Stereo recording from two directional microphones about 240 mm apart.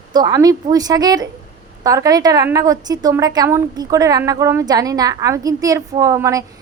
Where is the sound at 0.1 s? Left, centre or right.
Centre.